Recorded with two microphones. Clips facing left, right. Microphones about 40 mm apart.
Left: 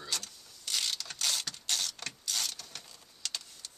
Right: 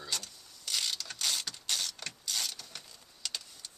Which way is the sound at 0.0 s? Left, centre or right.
Centre.